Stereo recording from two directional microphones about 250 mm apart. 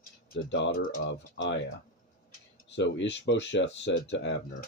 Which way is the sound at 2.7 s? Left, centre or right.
Left.